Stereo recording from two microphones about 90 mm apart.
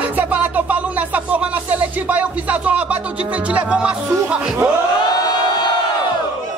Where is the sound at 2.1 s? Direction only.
15° right (ahead or behind).